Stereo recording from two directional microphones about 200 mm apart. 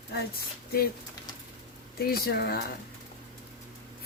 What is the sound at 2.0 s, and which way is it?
Speech, 50° left (ahead or behind).